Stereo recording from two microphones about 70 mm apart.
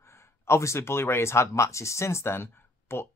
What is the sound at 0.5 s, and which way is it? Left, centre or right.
Speech, left.